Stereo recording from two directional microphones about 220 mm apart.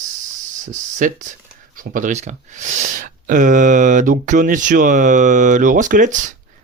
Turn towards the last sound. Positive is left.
turn(degrees=-35)  # may be behind; listen again after turning